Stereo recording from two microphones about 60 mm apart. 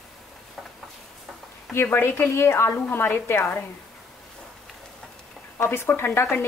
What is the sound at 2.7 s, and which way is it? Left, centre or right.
Speech, left.